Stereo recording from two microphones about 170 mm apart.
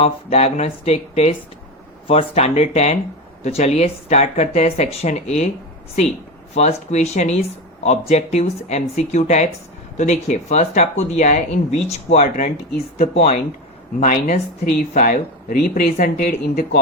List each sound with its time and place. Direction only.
0.0 s speech: 35° left (ahead or behind)
6.5 s speech: 40° left (ahead or behind); by 16.8 s 55° left (ahead or behind)